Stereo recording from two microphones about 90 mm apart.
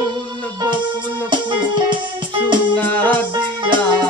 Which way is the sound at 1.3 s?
60° right (ahead or behind).